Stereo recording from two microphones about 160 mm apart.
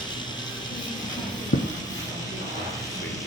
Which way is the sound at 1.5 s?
55° left (ahead or behind).